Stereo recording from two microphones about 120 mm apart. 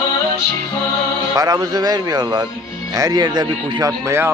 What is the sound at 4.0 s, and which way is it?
Speech, 20° right (ahead or behind).